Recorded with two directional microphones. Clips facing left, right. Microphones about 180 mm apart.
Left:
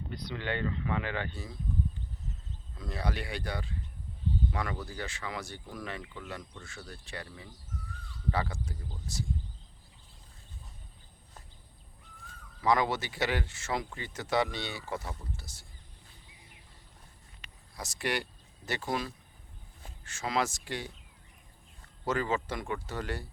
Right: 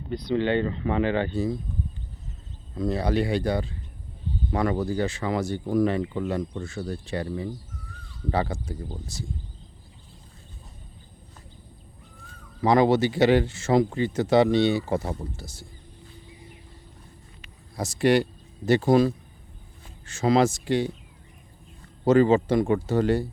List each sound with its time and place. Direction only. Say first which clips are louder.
0.1 s speech: right 13 dB; 25° right (ahead or behind)
2.7 s speech: right 12 dB; 30° right (ahead or behind)
12.6 s speech: right 9 dB; 30° right (ahead or behind)
17.7 s speech: right 13 dB; 30° right (ahead or behind)
22.0 s speech: right 13 dB; 30° right (ahead or behind)